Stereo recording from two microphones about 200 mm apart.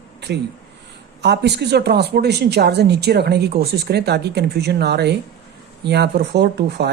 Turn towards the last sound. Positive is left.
turn(degrees=-55)  # may be behind; listen again after turning